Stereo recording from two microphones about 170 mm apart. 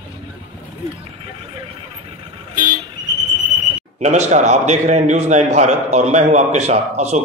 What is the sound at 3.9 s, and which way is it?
A man's voice, 40° right (ahead or behind).